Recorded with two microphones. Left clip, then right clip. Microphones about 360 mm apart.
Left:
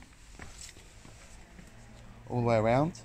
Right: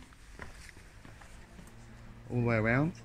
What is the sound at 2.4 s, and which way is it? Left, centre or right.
Speech, centre.